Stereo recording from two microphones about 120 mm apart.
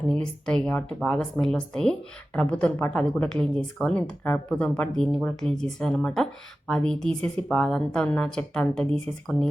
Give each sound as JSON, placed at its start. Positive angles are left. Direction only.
{"t": 0.1, "sound": "speech", "side_deg": 5}